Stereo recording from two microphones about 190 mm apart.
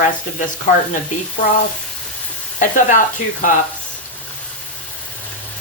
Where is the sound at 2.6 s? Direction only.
45° left (ahead or behind).